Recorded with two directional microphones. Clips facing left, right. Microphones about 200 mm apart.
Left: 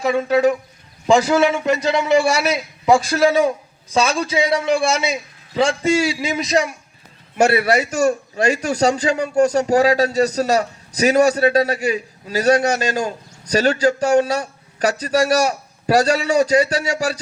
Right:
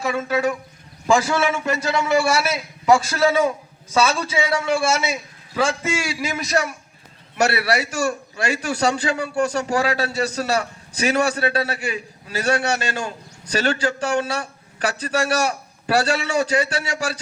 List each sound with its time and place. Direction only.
0.3 s a man's voice: 20° left (ahead or behind)
5.8 s a man's voice: 30° left (ahead or behind)
6.2 s a man's voice: 20° left (ahead or behind)
7.6 s a man's voice: 45° left (ahead or behind)